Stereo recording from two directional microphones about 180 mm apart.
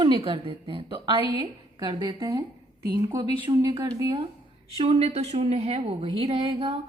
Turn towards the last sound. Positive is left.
turn(degrees=-35)  # may be behind; listen again after turning